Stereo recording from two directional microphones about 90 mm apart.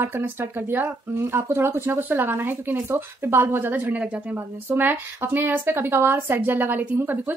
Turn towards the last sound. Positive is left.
turn(degrees=-20)  # may be behind; listen again after turning